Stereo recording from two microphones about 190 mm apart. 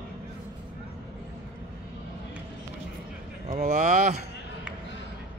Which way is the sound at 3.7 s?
40° right (ahead or behind).